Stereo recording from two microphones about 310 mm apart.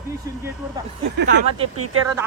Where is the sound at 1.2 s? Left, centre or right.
Right.